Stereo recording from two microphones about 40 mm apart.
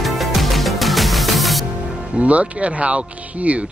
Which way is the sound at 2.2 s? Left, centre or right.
Right.